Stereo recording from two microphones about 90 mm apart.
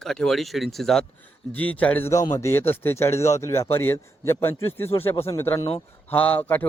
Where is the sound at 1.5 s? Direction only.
15° left (ahead or behind).